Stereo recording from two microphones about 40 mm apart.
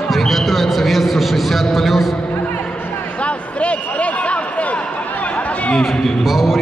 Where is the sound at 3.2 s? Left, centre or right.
Left.